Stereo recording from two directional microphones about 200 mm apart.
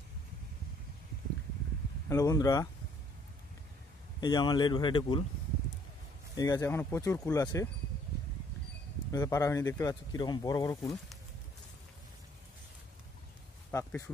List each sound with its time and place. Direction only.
2.0 s speech: 15° left (ahead or behind)
4.2 s speech: 20° left (ahead or behind)
6.3 s speech: 20° left (ahead or behind)
9.1 s speech: 15° left (ahead or behind)
13.7 s speech: 15° left (ahead or behind)